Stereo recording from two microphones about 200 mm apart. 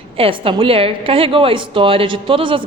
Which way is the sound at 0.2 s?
25° right (ahead or behind).